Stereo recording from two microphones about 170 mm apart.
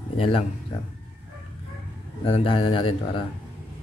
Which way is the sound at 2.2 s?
35° left (ahead or behind).